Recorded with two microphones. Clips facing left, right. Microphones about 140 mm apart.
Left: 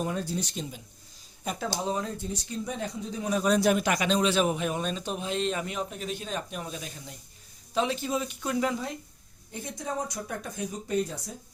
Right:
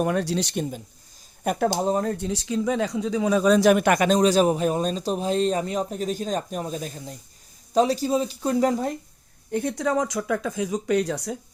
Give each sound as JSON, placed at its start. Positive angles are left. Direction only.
{"t": 0.0, "sound": "speech", "side_deg": -70}
{"t": 1.8, "sound": "speech", "side_deg": -45}
{"t": 2.1, "sound": "speech", "side_deg": -85}
{"t": 9.5, "sound": "speech", "side_deg": -65}